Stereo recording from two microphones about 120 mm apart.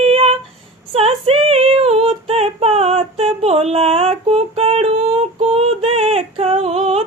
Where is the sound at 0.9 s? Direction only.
55° right (ahead or behind).